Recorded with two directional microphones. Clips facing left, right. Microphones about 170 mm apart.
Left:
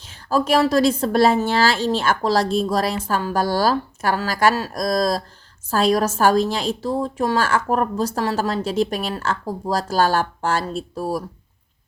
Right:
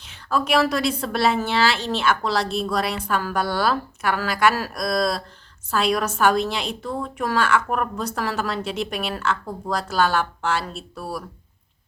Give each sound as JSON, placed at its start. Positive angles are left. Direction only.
{"t": 0.3, "sound": "a woman's voice", "side_deg": 40}